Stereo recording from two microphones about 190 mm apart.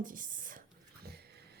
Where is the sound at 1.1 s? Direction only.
55° right (ahead or behind).